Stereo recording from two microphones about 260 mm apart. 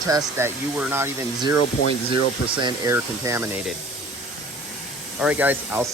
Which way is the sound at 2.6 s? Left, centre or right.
Centre.